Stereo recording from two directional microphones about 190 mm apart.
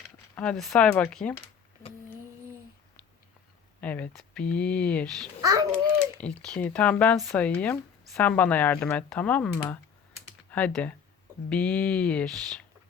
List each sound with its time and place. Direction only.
0.3 s speech: 5° left (ahead or behind)
3.8 s speech: 10° left (ahead or behind)
5.4 s a child's voice: 20° right (ahead or behind)
6.1 s speech: 5° left (ahead or behind)